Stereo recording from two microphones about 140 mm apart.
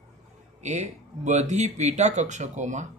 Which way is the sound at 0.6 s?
55° right (ahead or behind).